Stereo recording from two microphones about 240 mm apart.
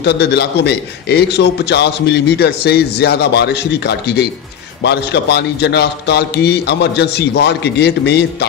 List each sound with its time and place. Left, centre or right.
0.0 s a man's voice: left